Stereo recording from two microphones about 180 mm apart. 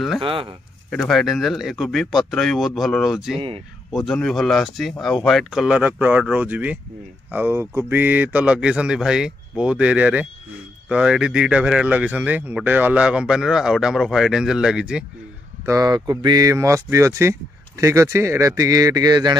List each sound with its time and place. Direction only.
0.2 s speech: 30° right (ahead or behind)
0.8 s speech: centre (ahead or behind)
3.3 s speech: 30° right (ahead or behind)
3.9 s speech: centre (ahead or behind)
15.6 s speech: 20° right (ahead or behind)